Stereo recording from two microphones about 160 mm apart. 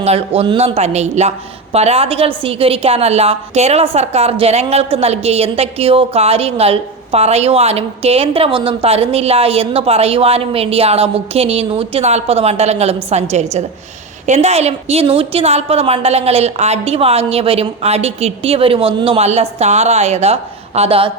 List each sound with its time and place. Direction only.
0.0 s a woman's voice: 40° right (ahead or behind)